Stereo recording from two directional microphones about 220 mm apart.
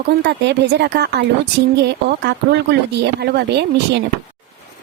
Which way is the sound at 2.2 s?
50° right (ahead or behind).